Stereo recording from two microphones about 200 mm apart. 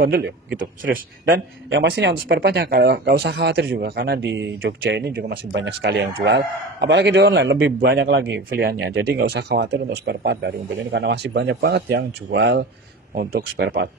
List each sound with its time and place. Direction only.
0.0 s a man's voice: 50° right (ahead or behind)
13.1 s speech: 50° right (ahead or behind)